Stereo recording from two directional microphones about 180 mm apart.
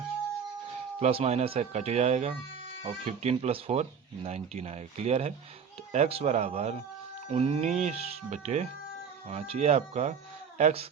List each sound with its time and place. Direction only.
0.9 s speech: 35° right (ahead or behind)